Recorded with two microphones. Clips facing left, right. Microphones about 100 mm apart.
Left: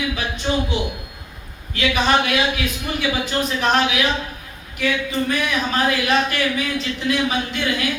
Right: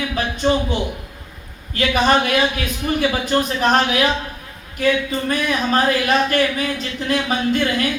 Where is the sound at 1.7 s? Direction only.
40° right (ahead or behind).